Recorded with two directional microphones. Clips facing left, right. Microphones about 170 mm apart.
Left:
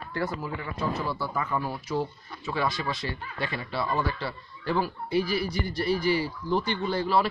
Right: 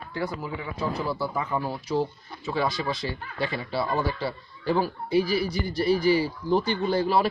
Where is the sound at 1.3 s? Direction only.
15° right (ahead or behind); by 4.9 s 35° right (ahead or behind).